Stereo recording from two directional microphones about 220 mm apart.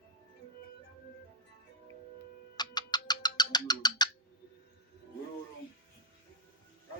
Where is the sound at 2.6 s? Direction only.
20° left (ahead or behind).